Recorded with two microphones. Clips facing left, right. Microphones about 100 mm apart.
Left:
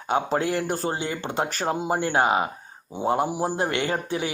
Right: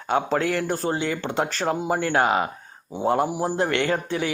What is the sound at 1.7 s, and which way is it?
Speech, 25° left (ahead or behind).